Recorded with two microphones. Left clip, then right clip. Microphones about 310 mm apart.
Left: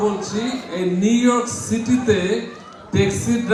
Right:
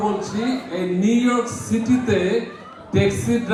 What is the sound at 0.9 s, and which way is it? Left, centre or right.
A man's voice, left.